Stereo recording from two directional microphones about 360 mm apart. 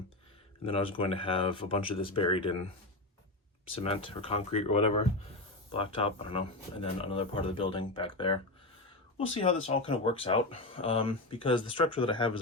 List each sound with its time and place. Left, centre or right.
0.6 s speech: centre
3.7 s speech: centre